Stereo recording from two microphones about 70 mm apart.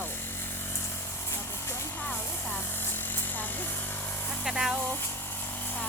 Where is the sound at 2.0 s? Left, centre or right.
Left.